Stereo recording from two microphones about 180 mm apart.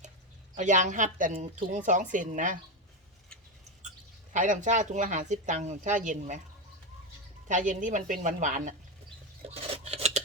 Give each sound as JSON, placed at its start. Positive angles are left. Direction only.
{"t": 0.5, "sound": "speech", "side_deg": -45}
{"t": 4.3, "sound": "speech", "side_deg": -45}
{"t": 7.4, "sound": "speech", "side_deg": -45}
{"t": 9.4, "sound": "cutlery", "side_deg": -35}